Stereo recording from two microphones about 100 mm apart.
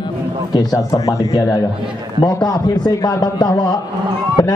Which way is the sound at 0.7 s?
35° left (ahead or behind).